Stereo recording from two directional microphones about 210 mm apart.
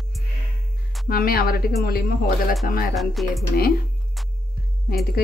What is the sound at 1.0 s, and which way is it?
Speech, 45° left (ahead or behind).